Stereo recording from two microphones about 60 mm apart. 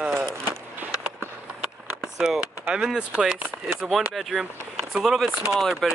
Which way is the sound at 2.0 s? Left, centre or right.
Centre.